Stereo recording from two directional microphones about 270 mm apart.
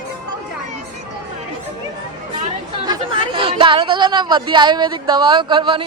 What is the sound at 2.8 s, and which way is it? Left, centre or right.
Speech, centre.